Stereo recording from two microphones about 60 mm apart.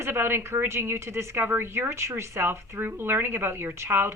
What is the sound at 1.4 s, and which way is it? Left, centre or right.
Speech, right.